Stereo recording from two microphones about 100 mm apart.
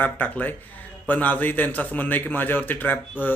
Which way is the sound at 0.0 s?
20° left (ahead or behind).